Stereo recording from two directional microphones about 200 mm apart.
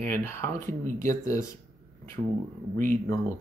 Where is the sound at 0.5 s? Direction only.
40° right (ahead or behind).